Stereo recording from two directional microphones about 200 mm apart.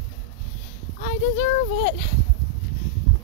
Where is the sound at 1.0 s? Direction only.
35° left (ahead or behind).